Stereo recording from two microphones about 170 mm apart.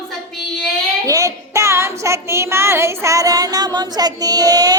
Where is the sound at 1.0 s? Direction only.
20° right (ahead or behind).